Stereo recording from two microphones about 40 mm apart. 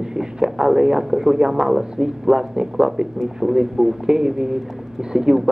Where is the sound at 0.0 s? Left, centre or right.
Centre.